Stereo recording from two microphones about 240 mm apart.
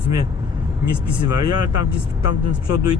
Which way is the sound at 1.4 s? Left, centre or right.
Left.